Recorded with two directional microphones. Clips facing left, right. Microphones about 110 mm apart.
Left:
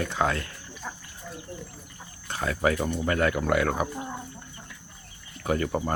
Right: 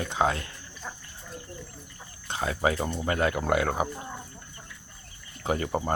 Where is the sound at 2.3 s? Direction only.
20° right (ahead or behind).